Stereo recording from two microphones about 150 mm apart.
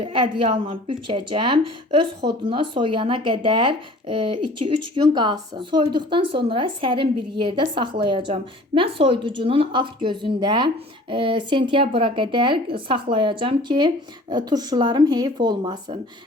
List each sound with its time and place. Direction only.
0.0 s a woman's voice: 35° right (ahead or behind)